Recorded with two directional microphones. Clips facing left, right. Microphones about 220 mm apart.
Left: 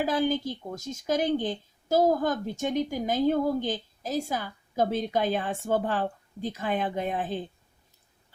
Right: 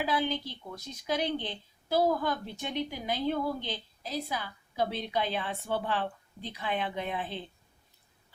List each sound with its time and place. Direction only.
0.0 s speech: 45° left (ahead or behind)